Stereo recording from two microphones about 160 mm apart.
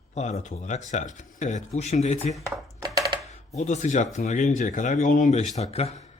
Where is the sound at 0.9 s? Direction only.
50° left (ahead or behind).